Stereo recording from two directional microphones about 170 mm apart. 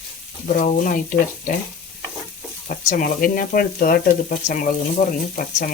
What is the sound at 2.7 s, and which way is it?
Speech, 50° left (ahead or behind).